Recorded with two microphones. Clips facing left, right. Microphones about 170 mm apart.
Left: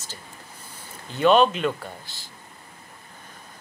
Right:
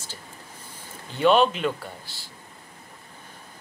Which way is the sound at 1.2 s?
10° right (ahead or behind).